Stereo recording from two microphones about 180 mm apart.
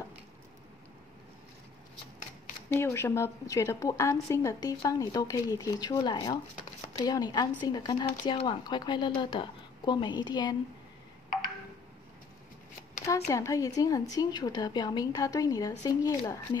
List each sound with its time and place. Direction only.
2.7 s a woman's voice: 15° left (ahead or behind)
13.0 s a woman's voice: 15° left (ahead or behind)